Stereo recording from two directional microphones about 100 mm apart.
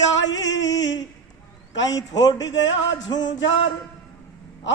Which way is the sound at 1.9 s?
40° left (ahead or behind).